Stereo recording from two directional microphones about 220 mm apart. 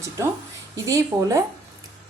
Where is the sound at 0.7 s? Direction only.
15° right (ahead or behind).